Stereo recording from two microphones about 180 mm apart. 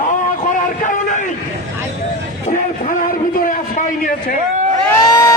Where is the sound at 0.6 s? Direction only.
45° left (ahead or behind).